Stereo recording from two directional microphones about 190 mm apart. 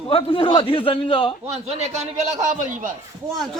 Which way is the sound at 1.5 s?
35° right (ahead or behind).